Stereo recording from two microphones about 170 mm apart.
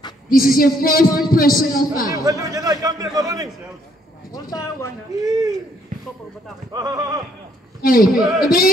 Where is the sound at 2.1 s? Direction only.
20° right (ahead or behind).